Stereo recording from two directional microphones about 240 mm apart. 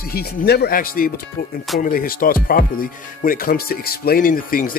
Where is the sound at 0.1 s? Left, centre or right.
Left.